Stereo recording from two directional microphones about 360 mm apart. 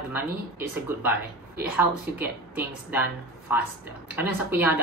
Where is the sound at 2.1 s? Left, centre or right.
Centre.